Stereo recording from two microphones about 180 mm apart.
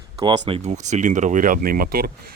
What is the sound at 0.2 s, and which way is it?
Speech, 25° right (ahead or behind).